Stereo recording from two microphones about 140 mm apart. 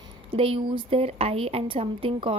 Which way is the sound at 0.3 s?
40° right (ahead or behind).